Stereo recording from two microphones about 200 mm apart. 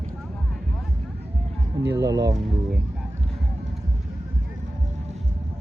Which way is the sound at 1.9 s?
15° right (ahead or behind).